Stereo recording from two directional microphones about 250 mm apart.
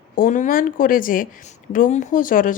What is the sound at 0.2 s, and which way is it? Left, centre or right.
Speech, left.